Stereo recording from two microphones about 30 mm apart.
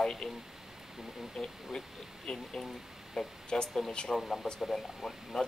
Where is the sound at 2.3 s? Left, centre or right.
Centre.